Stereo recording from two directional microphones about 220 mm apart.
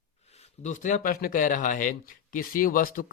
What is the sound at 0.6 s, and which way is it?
A man's voice, 35° left (ahead or behind).